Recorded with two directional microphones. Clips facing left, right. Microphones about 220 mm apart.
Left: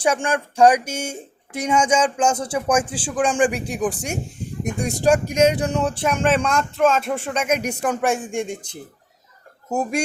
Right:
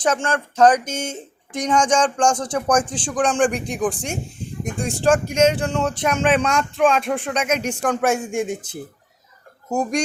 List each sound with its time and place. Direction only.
0.0 s speech: 10° left (ahead or behind)
4.9 s speech: 40° left (ahead or behind)
5.5 s speech: 10° left (ahead or behind)
6.1 s speech: centre (ahead or behind)
9.6 s speech: 5° left (ahead or behind)